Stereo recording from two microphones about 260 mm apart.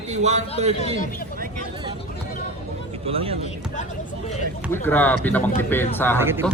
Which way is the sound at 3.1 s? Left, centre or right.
Right.